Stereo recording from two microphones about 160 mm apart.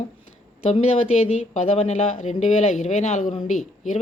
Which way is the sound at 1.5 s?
40° left (ahead or behind).